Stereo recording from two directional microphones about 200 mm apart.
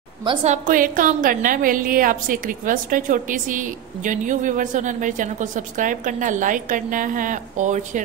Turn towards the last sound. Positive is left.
turn(degrees=-40)  # may be behind; listen again after turning